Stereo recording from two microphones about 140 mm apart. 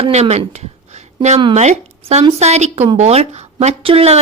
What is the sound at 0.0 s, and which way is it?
A woman's voice, 50° right (ahead or behind).